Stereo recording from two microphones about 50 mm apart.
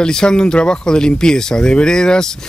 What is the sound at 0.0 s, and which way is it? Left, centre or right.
Speech, centre.